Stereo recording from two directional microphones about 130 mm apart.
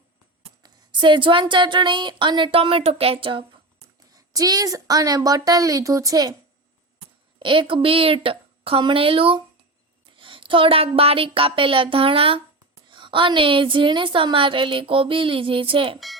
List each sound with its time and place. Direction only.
0.6 s speech: 35° right (ahead or behind)
4.1 s a woman's voice: 30° right (ahead or behind)
7.3 s a woman's voice: 40° right (ahead or behind)